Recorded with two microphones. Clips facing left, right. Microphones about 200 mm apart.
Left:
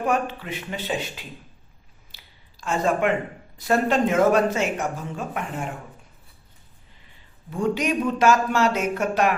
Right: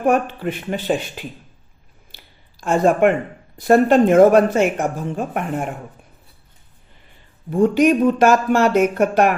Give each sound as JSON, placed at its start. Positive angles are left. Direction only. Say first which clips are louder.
{"t": 0.0, "sound": "speech", "louder": "right 6 dB", "side_deg": -55}
{"t": 2.1, "sound": "a sound", "louder": "right 5 dB", "side_deg": -55}
{"t": 3.6, "sound": "speech", "louder": "right 8 dB", "side_deg": -55}
{"t": 7.5, "sound": "speech", "louder": "right 9 dB", "side_deg": -55}